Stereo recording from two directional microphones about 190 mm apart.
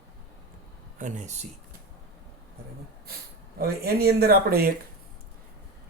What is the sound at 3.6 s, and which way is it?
Speech, 55° right (ahead or behind).